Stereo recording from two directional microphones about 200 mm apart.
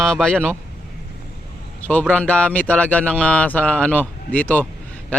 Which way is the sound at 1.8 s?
5° left (ahead or behind).